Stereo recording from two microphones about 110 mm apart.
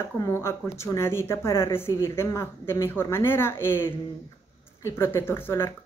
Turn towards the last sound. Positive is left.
turn(degrees=20)  # may be behind; listen again after turning